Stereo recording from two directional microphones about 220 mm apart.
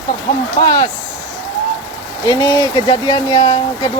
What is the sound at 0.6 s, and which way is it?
Speech, 15° left (ahead or behind).